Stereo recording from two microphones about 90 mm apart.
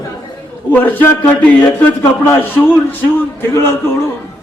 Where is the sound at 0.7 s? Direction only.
20° left (ahead or behind).